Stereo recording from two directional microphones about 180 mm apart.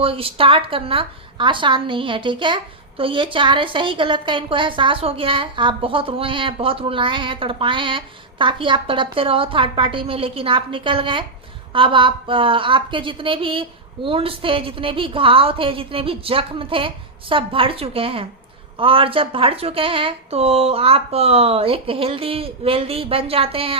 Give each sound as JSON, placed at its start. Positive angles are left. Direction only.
{"t": 0.0, "sound": "a woman's voice", "side_deg": -30}